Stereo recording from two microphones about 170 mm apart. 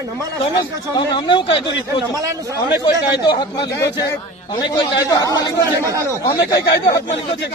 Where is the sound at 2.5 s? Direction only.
15° right (ahead or behind).